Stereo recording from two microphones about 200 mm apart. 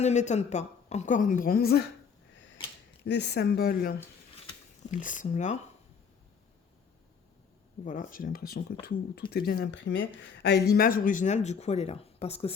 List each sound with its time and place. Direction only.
0.0 s speech: 35° left (ahead or behind)
3.0 s speech: 60° left (ahead or behind); by 5.6 s 35° left (ahead or behind)
7.9 s speech: 40° left (ahead or behind)
9.8 s speech: 70° left (ahead or behind); by 12.5 s 30° left (ahead or behind)